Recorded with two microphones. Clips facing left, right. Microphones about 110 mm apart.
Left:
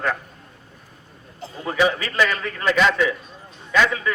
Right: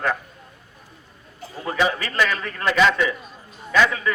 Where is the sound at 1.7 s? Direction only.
Centre (ahead or behind).